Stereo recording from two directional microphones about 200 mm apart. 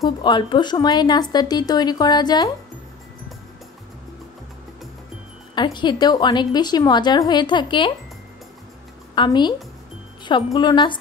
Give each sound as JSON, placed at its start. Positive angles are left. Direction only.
{"t": 0.0, "sound": "a woman's voice", "side_deg": 25}
{"t": 5.5, "sound": "a woman's voice", "side_deg": 25}
{"t": 9.1, "sound": "a woman's voice", "side_deg": 25}